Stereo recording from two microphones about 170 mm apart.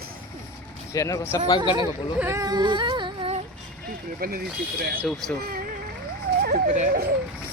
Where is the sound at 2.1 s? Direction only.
15° right (ahead or behind).